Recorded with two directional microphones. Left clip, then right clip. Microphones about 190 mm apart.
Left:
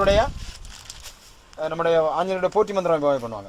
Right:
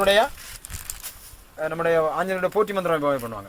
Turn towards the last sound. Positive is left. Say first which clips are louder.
# left 2 dB
turn(degrees=-10)  # may be behind; listen again after turning